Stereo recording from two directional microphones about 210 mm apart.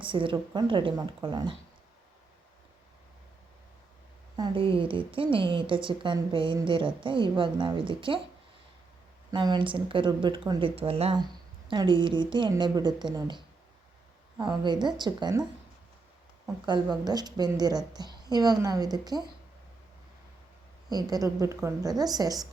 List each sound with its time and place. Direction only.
0.0 s a woman's voice: 25° right (ahead or behind)
4.4 s a woman's voice: 20° right (ahead or behind)
9.3 s a woman's voice: 20° right (ahead or behind)
16.6 s a woman's voice: 20° right (ahead or behind)
20.9 s a woman's voice: 15° right (ahead or behind)